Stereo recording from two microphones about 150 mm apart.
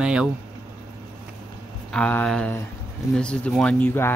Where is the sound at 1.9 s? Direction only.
5° left (ahead or behind).